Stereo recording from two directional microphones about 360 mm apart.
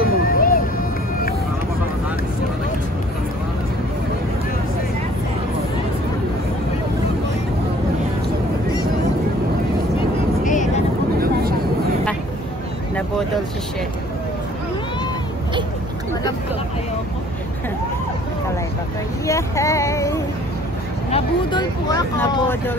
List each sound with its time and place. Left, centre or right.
0.0 s vehicle: left
10.4 s vehicle: left
19.2 s vehicle: centre